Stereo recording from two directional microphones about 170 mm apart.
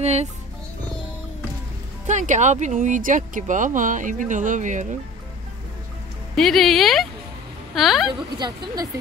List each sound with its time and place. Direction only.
0.0 s speech: 40° right (ahead or behind)
2.0 s speech: 45° right (ahead or behind)
6.3 s speech: centre (ahead or behind)
8.1 s speech: 25° right (ahead or behind)